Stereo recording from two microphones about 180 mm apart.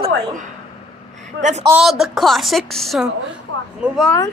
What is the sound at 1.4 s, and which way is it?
Speech, 40° right (ahead or behind).